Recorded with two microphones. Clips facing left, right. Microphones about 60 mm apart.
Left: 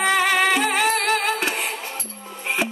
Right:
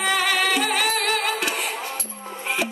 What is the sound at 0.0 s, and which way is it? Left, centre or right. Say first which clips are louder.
Music: left 3 dB; left.